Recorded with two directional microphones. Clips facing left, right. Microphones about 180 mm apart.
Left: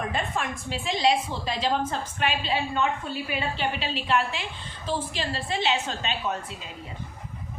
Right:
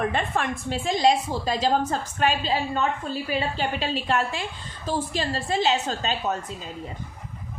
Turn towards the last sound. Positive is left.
turn(degrees=-40)  # may be behind; listen again after turning